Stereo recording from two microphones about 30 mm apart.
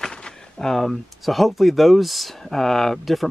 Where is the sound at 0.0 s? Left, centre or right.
Left.